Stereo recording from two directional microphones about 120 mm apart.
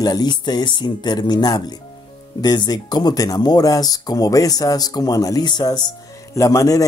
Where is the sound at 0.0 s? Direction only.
35° left (ahead or behind).